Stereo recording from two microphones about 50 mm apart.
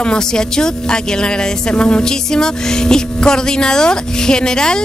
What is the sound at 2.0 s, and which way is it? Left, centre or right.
Speech, centre.